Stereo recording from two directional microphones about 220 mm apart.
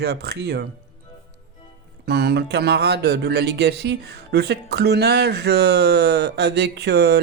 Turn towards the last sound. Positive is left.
turn(degrees=-50)  # may be behind; listen again after turning